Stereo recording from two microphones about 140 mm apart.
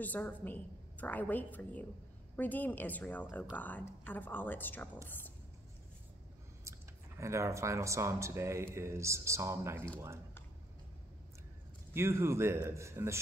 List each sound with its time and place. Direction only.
0.0 s a woman's voice: 10° left (ahead or behind)
7.2 s speech: 20° right (ahead or behind)
11.9 s speech: 20° right (ahead or behind)